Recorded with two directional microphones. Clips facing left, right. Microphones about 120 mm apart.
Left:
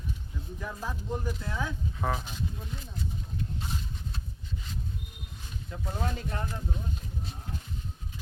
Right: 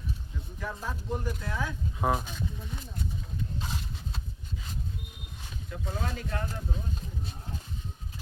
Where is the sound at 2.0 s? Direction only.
15° right (ahead or behind).